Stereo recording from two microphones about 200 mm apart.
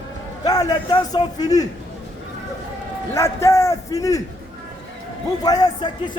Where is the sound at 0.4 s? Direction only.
20° left (ahead or behind).